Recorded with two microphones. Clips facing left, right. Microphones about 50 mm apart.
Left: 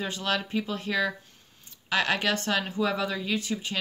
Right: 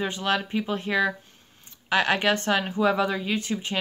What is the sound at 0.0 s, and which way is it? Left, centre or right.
Speech, right.